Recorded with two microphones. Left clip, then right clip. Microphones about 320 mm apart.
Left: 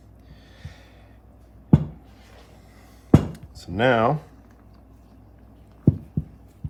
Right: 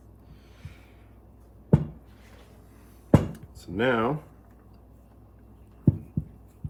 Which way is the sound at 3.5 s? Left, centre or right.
Left.